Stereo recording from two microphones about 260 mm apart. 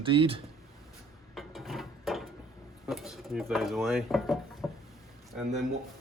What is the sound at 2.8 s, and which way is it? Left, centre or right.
Speech, centre.